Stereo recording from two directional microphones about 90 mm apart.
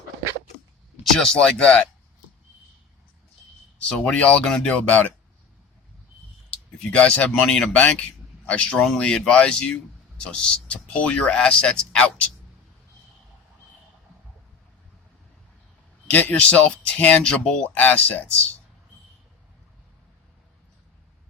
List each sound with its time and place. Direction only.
1.1 s speech: 5° left (ahead or behind)
3.8 s speech: 10° left (ahead or behind)
6.5 s speech: 15° left (ahead or behind)
7.8 s speech: 15° left (ahead or behind)
16.0 s speech: 20° left (ahead or behind)